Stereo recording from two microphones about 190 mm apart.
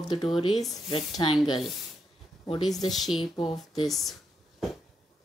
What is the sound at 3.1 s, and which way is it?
Speech, 25° left (ahead or behind).